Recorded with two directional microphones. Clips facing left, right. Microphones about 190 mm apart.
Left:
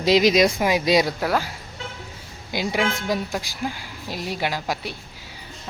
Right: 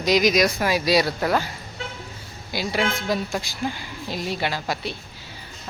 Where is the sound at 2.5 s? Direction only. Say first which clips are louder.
Left 1 dB; 15° left (ahead or behind).